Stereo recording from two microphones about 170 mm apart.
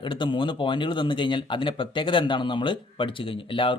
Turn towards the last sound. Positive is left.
turn(degrees=30)  # may be behind; listen again after turning